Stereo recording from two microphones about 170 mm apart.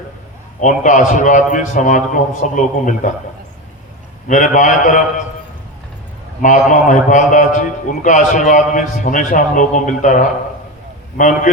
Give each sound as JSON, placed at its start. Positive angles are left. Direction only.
{"t": 0.6, "sound": "a man's voice", "side_deg": 50}
{"t": 4.3, "sound": "a man's voice", "side_deg": 50}
{"t": 6.4, "sound": "a man's voice", "side_deg": 50}